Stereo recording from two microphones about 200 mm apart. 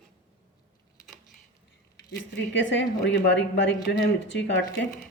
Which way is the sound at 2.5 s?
65° left (ahead or behind).